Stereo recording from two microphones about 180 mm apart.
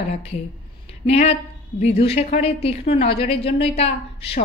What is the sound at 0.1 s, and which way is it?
A woman's voice, 35° left (ahead or behind).